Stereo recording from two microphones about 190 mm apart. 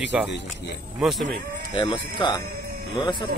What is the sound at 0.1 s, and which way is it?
Speech, 5° right (ahead or behind).